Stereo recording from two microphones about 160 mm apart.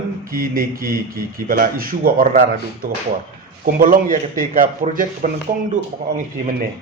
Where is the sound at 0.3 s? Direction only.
65° right (ahead or behind).